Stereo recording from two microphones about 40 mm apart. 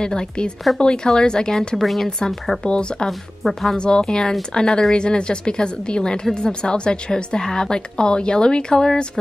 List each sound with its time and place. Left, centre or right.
0.0 s a woman's voice: centre
1.8 s speech: centre
2.0 s a woman's voice: centre
3.1 s speech: centre
3.7 s a woman's voice: left